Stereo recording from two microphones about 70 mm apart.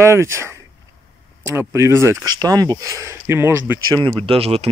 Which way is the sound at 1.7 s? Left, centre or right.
Right.